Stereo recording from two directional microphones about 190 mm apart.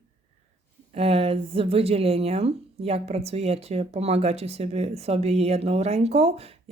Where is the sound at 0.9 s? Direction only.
30° right (ahead or behind).